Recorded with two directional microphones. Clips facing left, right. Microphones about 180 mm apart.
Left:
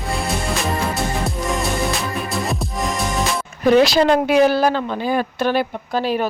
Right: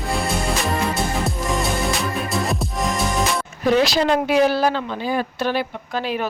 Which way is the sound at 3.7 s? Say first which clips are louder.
Left 4 dB; 55° left (ahead or behind).